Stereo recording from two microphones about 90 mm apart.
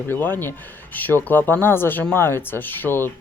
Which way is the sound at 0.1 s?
20° left (ahead or behind).